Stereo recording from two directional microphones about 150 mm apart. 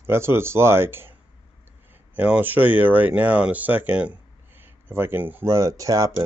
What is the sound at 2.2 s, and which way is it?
Speech, 10° right (ahead or behind).